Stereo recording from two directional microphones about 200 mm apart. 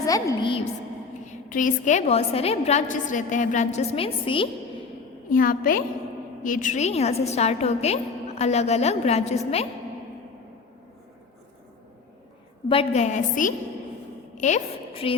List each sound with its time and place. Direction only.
0.0 s a woman's voice: 15° left (ahead or behind)
1.3 s a woman's voice: 40° left (ahead or behind)
5.3 s a woman's voice: 45° left (ahead or behind)
12.6 s a woman's voice: 25° left (ahead or behind)